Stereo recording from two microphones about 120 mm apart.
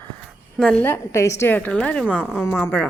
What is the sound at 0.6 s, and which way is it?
A woman's voice, 10° left (ahead or behind).